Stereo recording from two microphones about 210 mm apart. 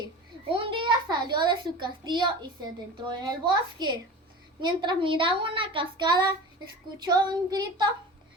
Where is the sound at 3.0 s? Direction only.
20° right (ahead or behind).